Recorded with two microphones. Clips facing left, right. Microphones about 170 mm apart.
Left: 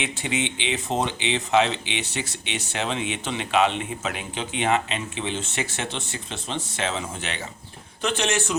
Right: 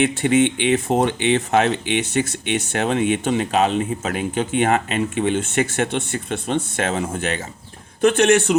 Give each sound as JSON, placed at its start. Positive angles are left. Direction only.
{"t": 0.0, "sound": "speech", "side_deg": -50}